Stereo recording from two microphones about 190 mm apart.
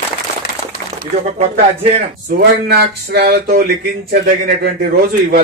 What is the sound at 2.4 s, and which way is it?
Speech, 55° right (ahead or behind).